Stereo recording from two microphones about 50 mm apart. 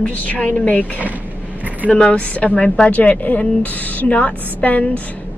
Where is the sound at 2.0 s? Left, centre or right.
Centre.